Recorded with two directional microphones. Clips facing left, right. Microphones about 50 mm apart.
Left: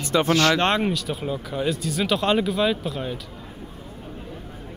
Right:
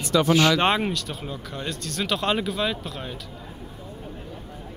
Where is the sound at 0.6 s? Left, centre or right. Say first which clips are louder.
Left 1 dB; centre.